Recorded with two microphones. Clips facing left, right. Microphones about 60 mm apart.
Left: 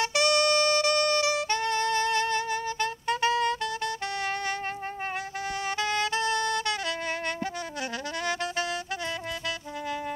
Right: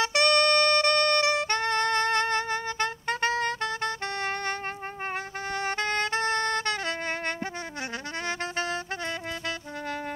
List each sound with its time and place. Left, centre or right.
0.0 s music: right
5.6 s saxophone: right